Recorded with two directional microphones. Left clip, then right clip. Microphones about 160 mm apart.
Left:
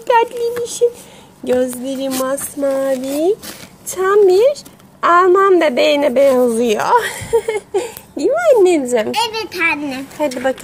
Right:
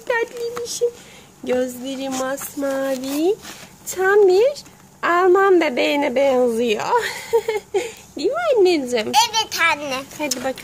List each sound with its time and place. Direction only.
0.1 s a child's voice: 10° left (ahead or behind)
1.5 s a woman's voice: 5° left (ahead or behind)
8.2 s speech: 10° left (ahead or behind)
9.1 s a child's voice: 65° right (ahead or behind); by 10.0 s 80° right
10.1 s a woman's voice: centre (ahead or behind)